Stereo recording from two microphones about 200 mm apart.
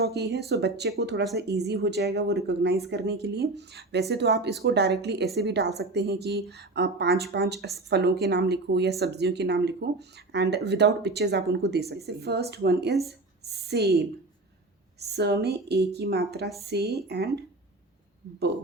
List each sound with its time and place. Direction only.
0.0 s a woman's voice: 55° right (ahead or behind)